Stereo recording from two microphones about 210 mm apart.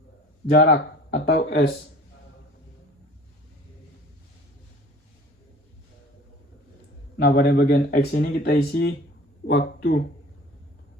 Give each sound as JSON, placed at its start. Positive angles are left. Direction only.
{"t": 0.5, "sound": "speech", "side_deg": 50}
{"t": 7.2, "sound": "speech", "side_deg": 50}